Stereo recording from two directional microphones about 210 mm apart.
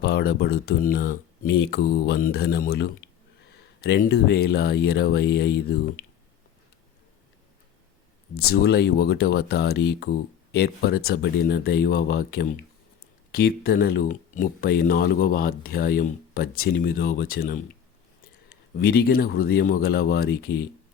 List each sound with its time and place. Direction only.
0.0 s speech: 50° left (ahead or behind)
8.4 s speech: 50° left (ahead or behind)
18.8 s speech: 45° left (ahead or behind)